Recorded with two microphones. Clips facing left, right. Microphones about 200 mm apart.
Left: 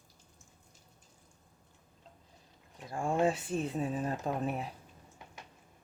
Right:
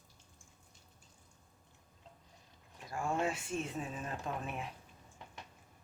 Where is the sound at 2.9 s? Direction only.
30° left (ahead or behind).